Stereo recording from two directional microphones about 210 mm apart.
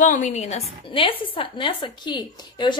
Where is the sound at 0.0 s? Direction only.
35° left (ahead or behind).